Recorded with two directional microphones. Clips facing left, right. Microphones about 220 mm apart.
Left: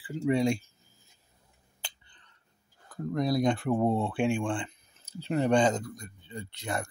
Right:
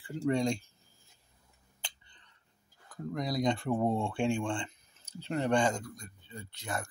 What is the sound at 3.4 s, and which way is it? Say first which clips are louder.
Speech: left 3 dB; 5° left (ahead or behind).